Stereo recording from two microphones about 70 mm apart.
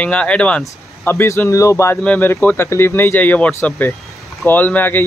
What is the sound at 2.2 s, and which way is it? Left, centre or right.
Speech, left.